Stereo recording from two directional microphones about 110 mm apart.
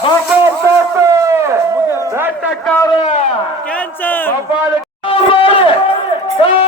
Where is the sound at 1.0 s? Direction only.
25° right (ahead or behind).